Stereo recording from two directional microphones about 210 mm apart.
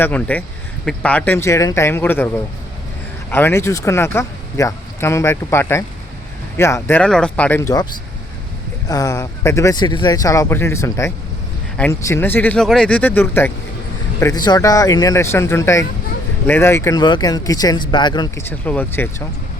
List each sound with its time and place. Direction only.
0.0 s speech: 5° left (ahead or behind)
8.9 s speech: 15° left (ahead or behind)